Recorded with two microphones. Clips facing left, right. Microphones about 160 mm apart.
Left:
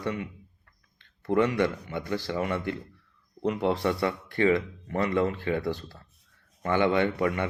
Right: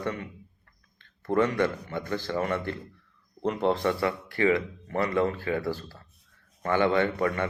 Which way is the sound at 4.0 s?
25° left (ahead or behind).